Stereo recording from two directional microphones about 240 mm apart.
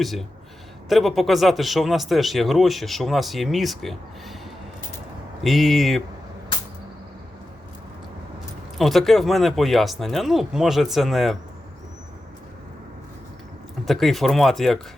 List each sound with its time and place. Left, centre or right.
0.0 s speech: centre
5.4 s speech: centre
8.8 s speech: centre
13.8 s speech: centre